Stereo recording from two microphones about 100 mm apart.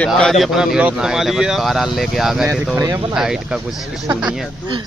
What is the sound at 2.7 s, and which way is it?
Speech, 30° right (ahead or behind).